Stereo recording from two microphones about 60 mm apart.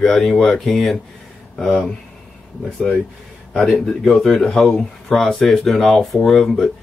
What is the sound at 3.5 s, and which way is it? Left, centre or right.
Speech, centre.